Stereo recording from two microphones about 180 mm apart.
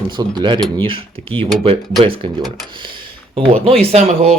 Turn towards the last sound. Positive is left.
turn(degrees=-35)  # may be behind; listen again after turning